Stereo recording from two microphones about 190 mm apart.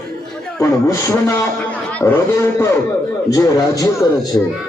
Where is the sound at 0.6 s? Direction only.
15° left (ahead or behind).